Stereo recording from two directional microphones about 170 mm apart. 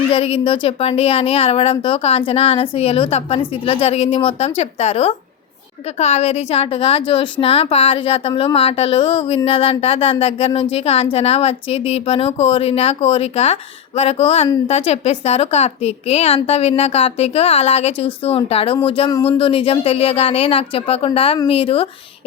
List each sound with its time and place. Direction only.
0.1 s a woman's voice: 30° left (ahead or behind)